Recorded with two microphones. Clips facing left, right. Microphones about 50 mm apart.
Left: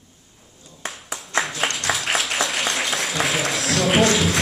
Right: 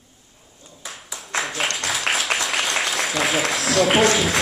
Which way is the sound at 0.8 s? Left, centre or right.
Left.